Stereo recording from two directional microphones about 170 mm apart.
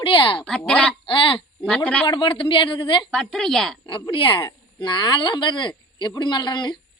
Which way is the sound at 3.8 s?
30° left (ahead or behind).